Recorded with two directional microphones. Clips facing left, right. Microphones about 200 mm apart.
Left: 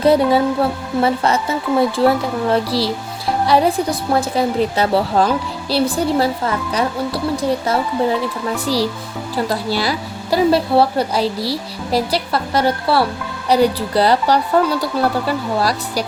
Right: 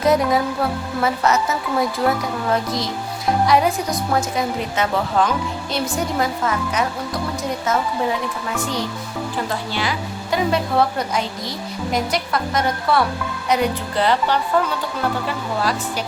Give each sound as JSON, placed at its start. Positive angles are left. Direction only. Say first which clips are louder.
{"t": 0.0, "sound": "a woman's voice", "louder": "left 4 dB", "side_deg": 30}
{"t": 8.5, "sound": "a woman's voice", "louder": "left 6 dB", "side_deg": 35}